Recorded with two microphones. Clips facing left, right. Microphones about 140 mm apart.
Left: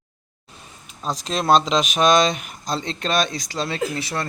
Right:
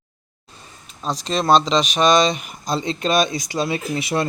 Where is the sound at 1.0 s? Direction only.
Centre (ahead or behind).